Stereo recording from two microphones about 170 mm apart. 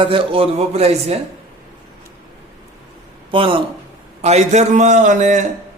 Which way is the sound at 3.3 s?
30° right (ahead or behind).